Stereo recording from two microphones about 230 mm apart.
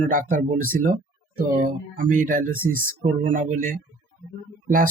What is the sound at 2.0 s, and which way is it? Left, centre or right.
Speech, right.